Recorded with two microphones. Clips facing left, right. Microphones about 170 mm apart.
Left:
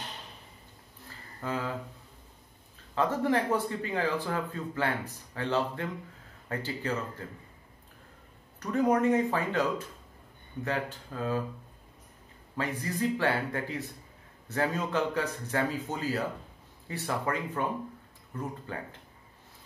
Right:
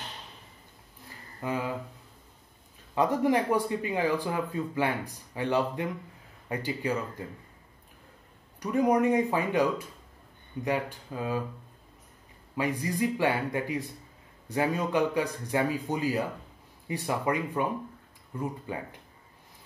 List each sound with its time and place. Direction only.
1.4 s speech: 15° right (ahead or behind)
2.9 s speech: 15° right (ahead or behind)
8.5 s speech: 15° right (ahead or behind)
12.5 s speech: 15° right (ahead or behind)